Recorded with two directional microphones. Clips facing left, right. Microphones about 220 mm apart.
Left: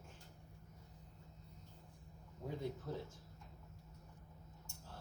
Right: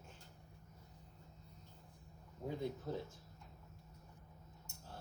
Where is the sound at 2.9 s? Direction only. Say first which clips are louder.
Right 3 dB; 25° right (ahead or behind).